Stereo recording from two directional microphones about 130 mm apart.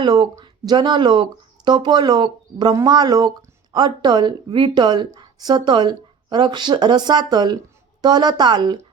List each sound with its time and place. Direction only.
0.0 s speech: 30° right (ahead or behind)